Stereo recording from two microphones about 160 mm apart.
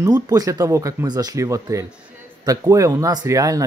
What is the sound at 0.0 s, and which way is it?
Speech, 20° right (ahead or behind).